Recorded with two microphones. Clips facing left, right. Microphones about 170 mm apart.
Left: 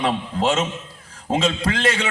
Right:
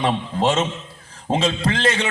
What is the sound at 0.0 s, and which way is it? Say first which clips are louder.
A man's voice: right 1 dB; 30° right (ahead or behind).